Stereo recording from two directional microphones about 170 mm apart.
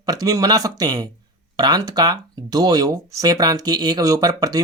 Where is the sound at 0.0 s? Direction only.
20° right (ahead or behind).